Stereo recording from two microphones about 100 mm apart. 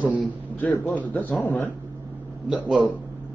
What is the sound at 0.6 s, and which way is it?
A man's voice, 15° left (ahead or behind).